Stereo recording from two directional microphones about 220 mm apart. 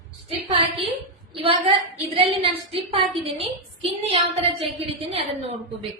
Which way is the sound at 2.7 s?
25° right (ahead or behind).